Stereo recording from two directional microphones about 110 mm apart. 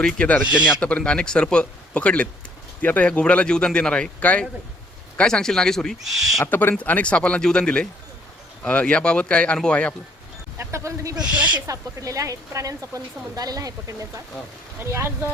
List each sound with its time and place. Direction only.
0.0 s speech: 5° left (ahead or behind)
6.4 s speech: 20° left (ahead or behind)
10.6 s a woman's voice: 25° right (ahead or behind)